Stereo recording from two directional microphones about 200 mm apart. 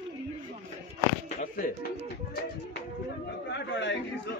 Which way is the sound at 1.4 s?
45° left (ahead or behind).